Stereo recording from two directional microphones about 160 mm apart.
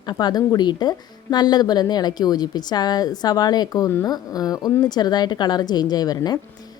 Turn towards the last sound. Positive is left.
turn(degrees=25)  # may be behind; listen again after turning